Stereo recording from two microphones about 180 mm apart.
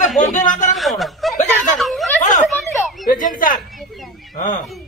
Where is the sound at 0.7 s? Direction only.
Centre (ahead or behind).